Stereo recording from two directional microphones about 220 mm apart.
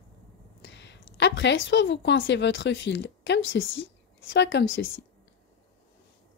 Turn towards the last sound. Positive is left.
turn(degrees=60)  # may be behind; listen again after turning